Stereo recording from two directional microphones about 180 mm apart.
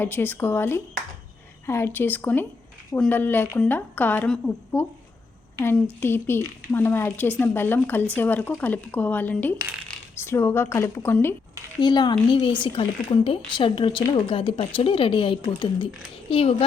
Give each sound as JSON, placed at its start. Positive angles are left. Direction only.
{"t": 0.0, "sound": "a woman's voice", "side_deg": 10}
{"t": 11.8, "sound": "a woman's voice", "side_deg": 25}